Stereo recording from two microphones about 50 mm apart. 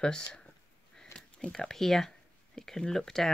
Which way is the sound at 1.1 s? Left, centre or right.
Left.